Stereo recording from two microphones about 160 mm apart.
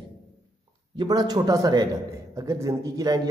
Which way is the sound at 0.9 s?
25° right (ahead or behind).